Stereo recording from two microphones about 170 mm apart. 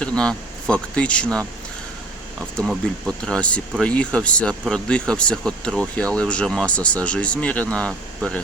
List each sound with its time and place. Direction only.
0.0 s speech: 5° left (ahead or behind)